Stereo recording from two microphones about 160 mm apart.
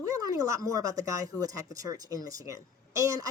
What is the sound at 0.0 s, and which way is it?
Speech, 20° right (ahead or behind).